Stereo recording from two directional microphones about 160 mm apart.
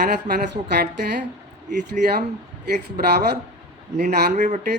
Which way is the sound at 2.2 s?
90° right.